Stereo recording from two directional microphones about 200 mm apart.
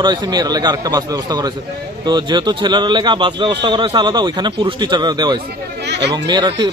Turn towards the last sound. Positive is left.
turn(degrees=-20)  # may be behind; listen again after turning